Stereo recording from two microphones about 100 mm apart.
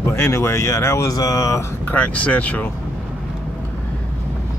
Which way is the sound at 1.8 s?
15° left (ahead or behind).